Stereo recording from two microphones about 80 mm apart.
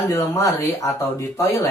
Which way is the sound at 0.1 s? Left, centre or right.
Left.